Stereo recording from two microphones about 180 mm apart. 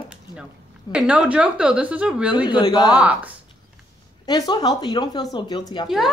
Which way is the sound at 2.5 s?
25° left (ahead or behind).